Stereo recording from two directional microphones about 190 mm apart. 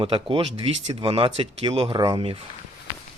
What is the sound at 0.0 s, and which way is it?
Speech, 30° right (ahead or behind).